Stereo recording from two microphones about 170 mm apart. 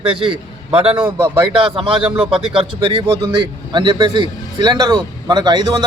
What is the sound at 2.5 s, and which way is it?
A man's voice, 30° right (ahead or behind).